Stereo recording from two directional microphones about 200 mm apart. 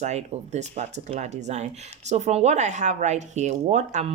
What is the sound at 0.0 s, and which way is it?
A woman's voice, 35° right (ahead or behind).